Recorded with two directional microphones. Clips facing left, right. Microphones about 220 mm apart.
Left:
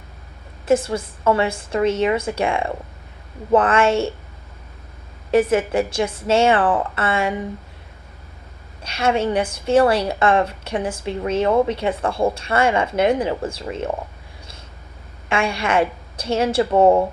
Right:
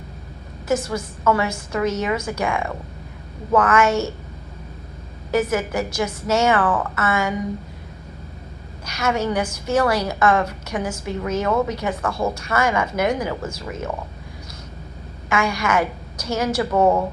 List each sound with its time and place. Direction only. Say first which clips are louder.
0.7 s a woman's voice: left 4 dB; 30° left (ahead or behind)
5.3 s a woman's voice: left 4 dB; 30° left (ahead or behind)
8.8 s a woman's voice: left 3 dB; 30° left (ahead or behind)
15.3 s a woman's voice: left 1 dB; 30° left (ahead or behind)